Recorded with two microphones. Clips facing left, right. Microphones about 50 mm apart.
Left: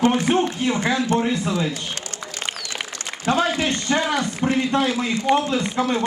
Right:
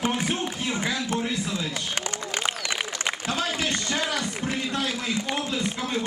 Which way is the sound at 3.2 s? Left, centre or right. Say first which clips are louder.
Left 10 dB; left.